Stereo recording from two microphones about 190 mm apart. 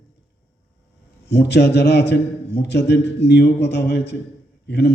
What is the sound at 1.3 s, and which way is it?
A man's voice, 60° left (ahead or behind).